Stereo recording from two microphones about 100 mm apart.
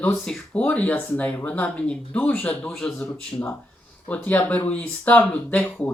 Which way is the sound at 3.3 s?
30° left (ahead or behind).